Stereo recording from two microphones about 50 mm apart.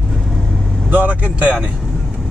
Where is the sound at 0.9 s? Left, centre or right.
Right.